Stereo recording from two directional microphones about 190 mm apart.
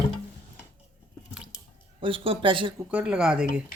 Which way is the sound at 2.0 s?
30° right (ahead or behind).